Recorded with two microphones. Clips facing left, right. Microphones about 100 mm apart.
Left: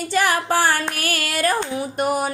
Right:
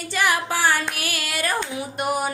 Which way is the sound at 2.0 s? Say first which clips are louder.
Left 2 dB; 40° left (ahead or behind).